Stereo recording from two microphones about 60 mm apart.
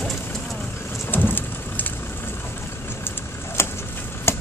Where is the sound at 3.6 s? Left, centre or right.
Left.